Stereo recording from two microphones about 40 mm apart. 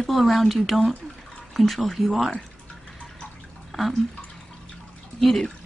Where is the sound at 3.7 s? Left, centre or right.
Centre.